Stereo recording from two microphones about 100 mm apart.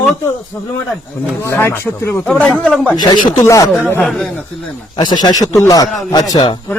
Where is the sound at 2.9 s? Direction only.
45° left (ahead or behind).